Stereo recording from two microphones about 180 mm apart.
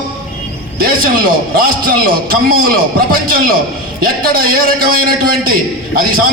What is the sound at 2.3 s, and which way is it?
A man's voice, 55° right (ahead or behind).